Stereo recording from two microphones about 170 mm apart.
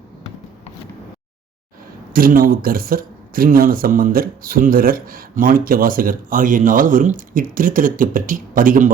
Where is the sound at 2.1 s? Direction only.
55° right (ahead or behind).